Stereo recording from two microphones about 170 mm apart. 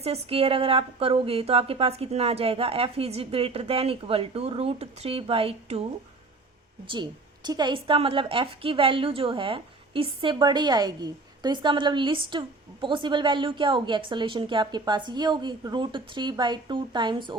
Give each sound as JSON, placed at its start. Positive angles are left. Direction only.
{"t": 0.0, "sound": "a woman's voice", "side_deg": -35}
{"t": 6.8, "sound": "a woman's voice", "side_deg": -25}